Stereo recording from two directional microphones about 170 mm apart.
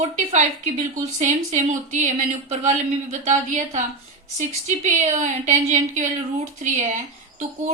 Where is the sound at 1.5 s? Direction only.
45° right (ahead or behind).